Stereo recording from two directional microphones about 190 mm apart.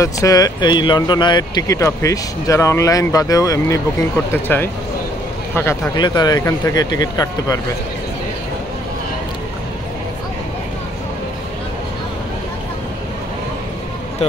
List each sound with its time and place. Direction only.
0.0 s speech: 20° left (ahead or behind)